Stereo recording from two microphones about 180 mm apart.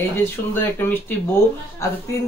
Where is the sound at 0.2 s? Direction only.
10° left (ahead or behind).